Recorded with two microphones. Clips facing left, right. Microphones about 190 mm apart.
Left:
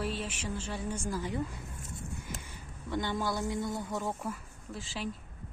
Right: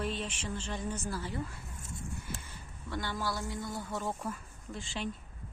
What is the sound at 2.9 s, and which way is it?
Speech, 20° left (ahead or behind).